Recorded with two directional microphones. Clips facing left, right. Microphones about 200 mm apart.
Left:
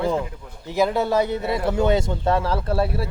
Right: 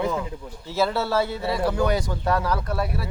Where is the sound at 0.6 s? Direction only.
15° left (ahead or behind).